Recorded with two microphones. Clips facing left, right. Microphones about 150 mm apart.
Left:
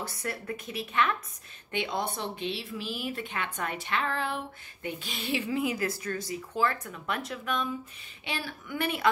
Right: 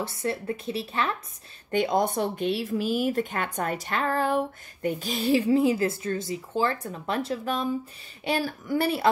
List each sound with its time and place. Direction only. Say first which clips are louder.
0.0 s a woman's voice: right 7 dB; 25° right (ahead or behind)
1.7 s a woman's voice: right 8 dB; 40° right (ahead or behind)